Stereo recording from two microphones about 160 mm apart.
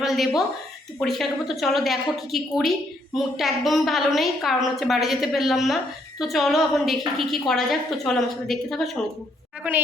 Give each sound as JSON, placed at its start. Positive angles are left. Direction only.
{"t": 0.0, "sound": "a woman's voice", "side_deg": 0}
{"t": 9.6, "sound": "a woman's voice", "side_deg": -10}